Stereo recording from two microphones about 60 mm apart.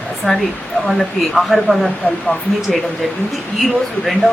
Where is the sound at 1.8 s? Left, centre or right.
Centre.